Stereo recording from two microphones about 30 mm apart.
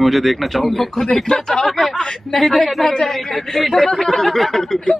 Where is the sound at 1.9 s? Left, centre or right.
Left.